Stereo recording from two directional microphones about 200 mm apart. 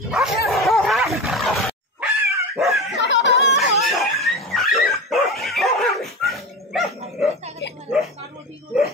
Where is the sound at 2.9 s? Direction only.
60° left (ahead or behind).